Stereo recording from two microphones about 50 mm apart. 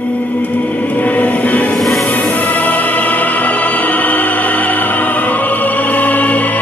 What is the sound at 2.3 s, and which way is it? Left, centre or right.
Music, left.